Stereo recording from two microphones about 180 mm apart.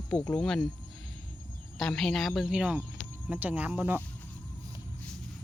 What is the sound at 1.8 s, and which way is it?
Speech, centre (ahead or behind).